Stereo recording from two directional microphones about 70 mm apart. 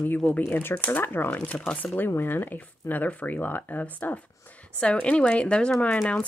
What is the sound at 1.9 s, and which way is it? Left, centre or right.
Speech, left.